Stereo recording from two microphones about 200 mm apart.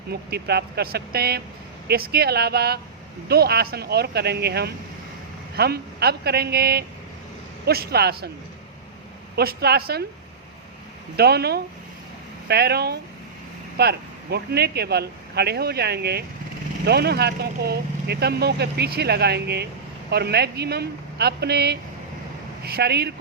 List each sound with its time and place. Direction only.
0.1 s speech: 55° right (ahead or behind)
9.3 s speech: 50° right (ahead or behind)
11.2 s speech: 55° right (ahead or behind)